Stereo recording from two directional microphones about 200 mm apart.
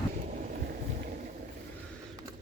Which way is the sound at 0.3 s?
45° right (ahead or behind).